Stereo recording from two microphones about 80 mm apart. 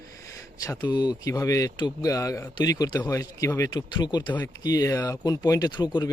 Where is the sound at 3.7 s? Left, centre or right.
Left.